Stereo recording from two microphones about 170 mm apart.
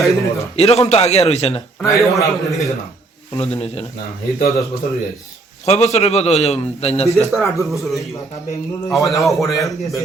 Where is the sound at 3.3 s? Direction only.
40° left (ahead or behind).